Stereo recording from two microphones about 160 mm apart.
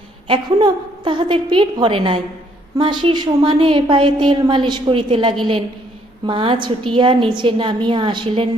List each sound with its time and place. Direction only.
0.3 s a woman's voice: 30° right (ahead or behind)